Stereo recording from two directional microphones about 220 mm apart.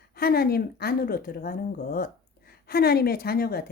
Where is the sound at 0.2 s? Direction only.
45° left (ahead or behind).